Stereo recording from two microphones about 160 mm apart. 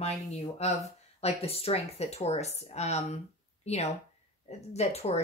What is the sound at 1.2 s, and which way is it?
A woman's voice, 40° left (ahead or behind).